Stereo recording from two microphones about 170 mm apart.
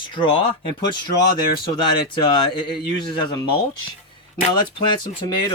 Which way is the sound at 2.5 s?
25° left (ahead or behind).